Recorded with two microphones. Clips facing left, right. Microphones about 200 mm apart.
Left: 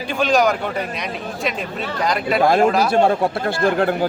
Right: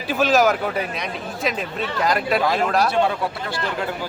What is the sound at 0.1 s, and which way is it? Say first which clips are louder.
Speech: even; 5° right (ahead or behind).